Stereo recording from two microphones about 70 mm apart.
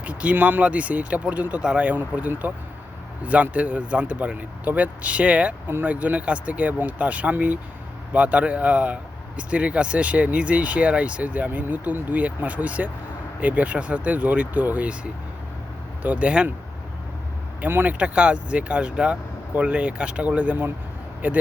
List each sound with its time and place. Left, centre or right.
0.0 s speech: centre
16.0 s speech: centre
17.6 s speech: right
18.0 s speech: centre